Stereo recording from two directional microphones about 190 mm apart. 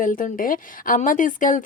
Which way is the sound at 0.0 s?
45° left (ahead or behind).